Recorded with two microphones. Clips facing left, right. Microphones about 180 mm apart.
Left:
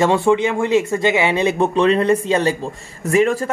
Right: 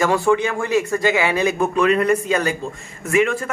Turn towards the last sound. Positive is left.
turn(degrees=35)  # may be behind; listen again after turning